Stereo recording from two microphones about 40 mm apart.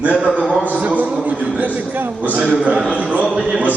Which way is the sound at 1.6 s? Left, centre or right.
Right.